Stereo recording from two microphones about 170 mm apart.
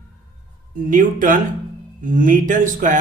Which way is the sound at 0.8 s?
50° right (ahead or behind).